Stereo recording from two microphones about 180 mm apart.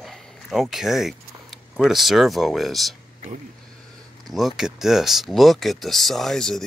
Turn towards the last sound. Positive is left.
turn(degrees=5)  # may be behind; listen again after turning